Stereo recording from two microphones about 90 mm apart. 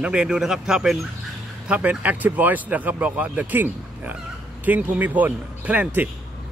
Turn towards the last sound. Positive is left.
turn(degrees=-20)  # may be behind; listen again after turning